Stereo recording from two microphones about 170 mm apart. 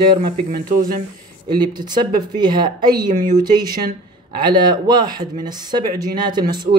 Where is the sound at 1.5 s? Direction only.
25° right (ahead or behind).